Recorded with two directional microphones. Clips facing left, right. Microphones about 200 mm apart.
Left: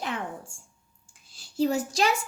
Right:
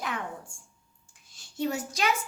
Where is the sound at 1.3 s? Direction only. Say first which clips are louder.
Left 5 dB; 30° left (ahead or behind).